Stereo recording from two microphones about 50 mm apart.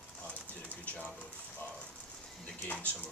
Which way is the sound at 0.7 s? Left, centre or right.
Left.